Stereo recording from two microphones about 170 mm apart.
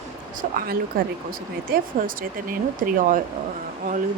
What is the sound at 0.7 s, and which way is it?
Speech, 60° right (ahead or behind).